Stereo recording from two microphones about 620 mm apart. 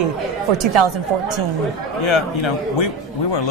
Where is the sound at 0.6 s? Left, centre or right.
Right.